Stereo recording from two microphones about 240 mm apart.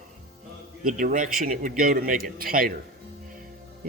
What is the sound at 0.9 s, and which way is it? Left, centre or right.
A man's voice, right.